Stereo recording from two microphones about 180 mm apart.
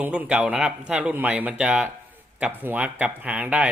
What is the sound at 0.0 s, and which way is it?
Speech, 5° right (ahead or behind).